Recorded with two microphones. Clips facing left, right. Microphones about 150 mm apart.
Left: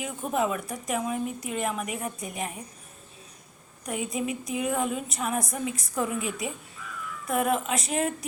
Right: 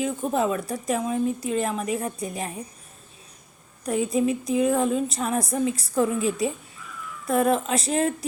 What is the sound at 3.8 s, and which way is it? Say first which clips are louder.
A woman's voice: right 7 dB; 35° right (ahead or behind).